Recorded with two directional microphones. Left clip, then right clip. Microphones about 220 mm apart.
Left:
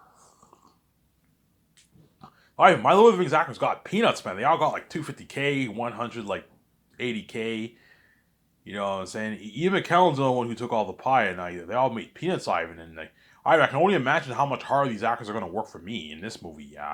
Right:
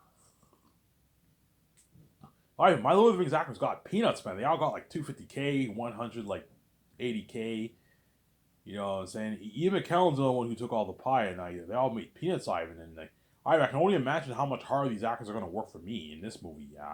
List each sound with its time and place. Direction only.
2.2 s speech: 20° left (ahead or behind)